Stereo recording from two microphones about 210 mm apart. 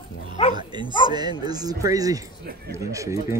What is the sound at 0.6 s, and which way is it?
Speech, 20° right (ahead or behind).